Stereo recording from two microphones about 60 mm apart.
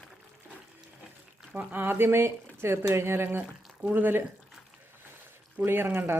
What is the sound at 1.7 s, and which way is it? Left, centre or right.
Speech, right.